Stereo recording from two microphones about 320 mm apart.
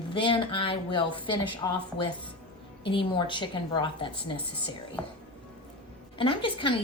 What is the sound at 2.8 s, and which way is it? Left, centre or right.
A woman's voice, centre.